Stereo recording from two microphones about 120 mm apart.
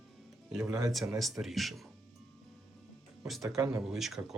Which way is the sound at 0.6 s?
25° right (ahead or behind).